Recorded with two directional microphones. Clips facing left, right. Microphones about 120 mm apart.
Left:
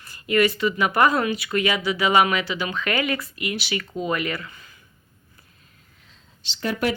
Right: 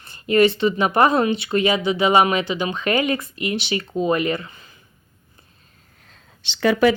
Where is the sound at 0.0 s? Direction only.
25° right (ahead or behind).